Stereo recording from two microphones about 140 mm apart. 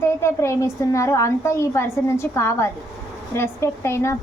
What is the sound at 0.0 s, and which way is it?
A woman's voice, 20° left (ahead or behind).